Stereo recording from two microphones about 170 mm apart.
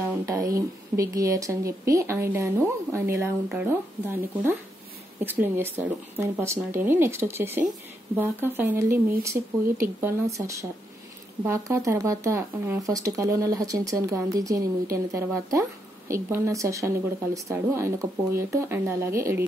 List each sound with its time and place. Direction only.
0.0 s speech: 15° right (ahead or behind)